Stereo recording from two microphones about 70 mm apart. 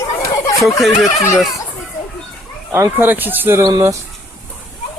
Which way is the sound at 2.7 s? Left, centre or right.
Right.